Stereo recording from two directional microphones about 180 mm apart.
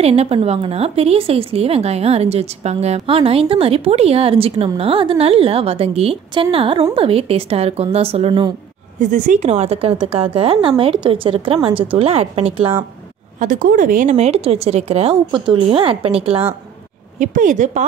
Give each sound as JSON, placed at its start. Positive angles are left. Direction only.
{"t": 0.0, "sound": "a woman's voice", "side_deg": -35}
{"t": 9.0, "sound": "a woman's voice", "side_deg": -45}
{"t": 13.4, "sound": "a woman's voice", "side_deg": -45}
{"t": 17.2, "sound": "speech", "side_deg": -45}